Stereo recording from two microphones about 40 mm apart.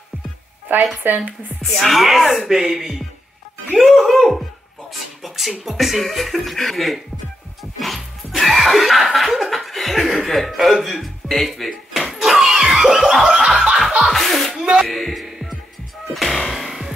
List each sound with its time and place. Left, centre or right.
1.0 s speech: right
1.6 s chuckle: centre
2.4 s music: centre
3.7 s chuckle: centre
5.2 s beatboxing: centre
5.6 s chuckle: centre
7.8 s laughter: centre
10.2 s speech: centre
11.4 s music: centre; by 13.7 s right
14.0 s music: centre
14.8 s speech: centre
16.2 s music: centre